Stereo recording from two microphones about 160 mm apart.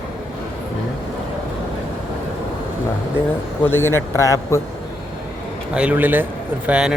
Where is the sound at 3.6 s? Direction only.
15° left (ahead or behind).